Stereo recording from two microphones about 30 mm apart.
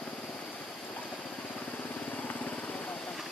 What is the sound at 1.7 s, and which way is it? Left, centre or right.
Vehicle, left.